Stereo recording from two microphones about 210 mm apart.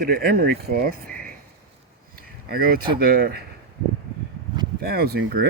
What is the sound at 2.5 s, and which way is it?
Speech, 45° right (ahead or behind).